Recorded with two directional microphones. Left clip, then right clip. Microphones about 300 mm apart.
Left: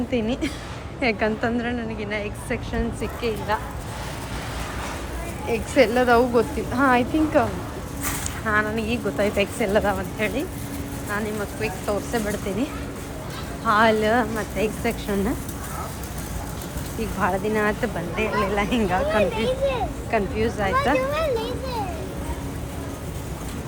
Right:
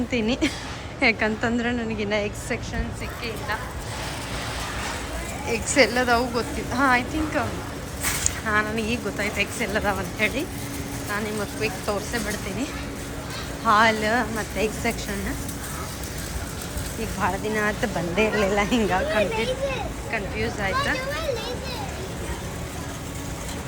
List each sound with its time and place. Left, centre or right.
0.1 s a woman's voice: centre
5.5 s a woman's voice: centre
11.6 s a woman's voice: centre
13.7 s a woman's voice: centre
17.0 s a woman's voice: centre
21.2 s children playing: left